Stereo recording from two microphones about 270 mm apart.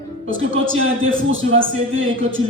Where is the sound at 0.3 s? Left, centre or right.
Right.